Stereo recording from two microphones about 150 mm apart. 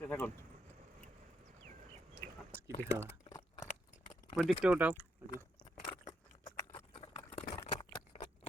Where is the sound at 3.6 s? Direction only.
50° left (ahead or behind).